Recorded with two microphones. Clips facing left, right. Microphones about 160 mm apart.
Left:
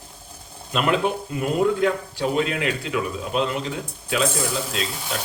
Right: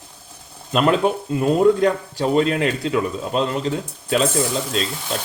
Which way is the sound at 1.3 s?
35° right (ahead or behind).